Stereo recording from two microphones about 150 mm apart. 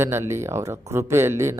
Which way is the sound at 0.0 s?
15° right (ahead or behind).